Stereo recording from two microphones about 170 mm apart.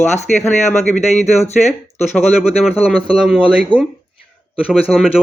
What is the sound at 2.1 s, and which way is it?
A man's voice, 5° right (ahead or behind).